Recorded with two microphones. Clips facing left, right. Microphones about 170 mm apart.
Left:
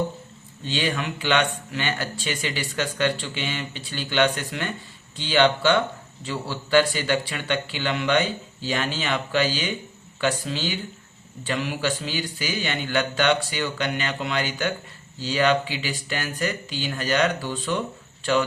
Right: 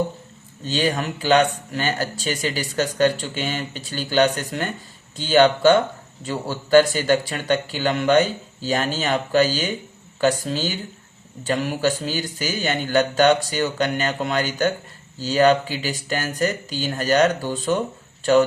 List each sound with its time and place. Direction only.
0.6 s speech: 40° right (ahead or behind)